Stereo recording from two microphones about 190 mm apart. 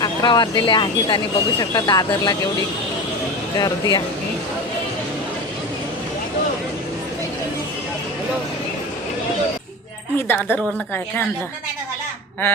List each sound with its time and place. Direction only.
0.0 s speech: 20° left (ahead or behind)
3.5 s speech: 20° left (ahead or behind)
10.2 s a woman's voice: 10° left (ahead or behind)